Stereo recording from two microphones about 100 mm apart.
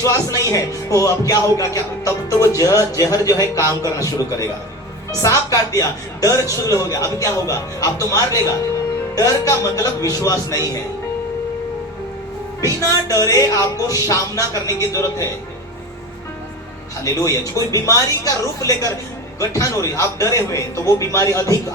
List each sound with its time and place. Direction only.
0.0 s music: 35° left (ahead or behind)
12.6 s music: 35° left (ahead or behind)
17.0 s music: 35° left (ahead or behind)